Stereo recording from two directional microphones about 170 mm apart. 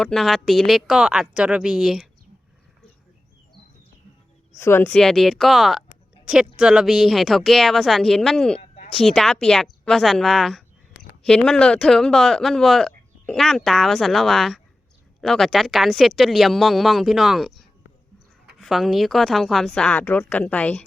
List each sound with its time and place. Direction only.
0.0 s speech: centre (ahead or behind)
4.5 s a woman's voice: 15° left (ahead or behind)
4.9 s speech: centre (ahead or behind)
8.5 s a sound: 35° left (ahead or behind)
8.9 s speech: centre (ahead or behind)
18.6 s speech: centre (ahead or behind)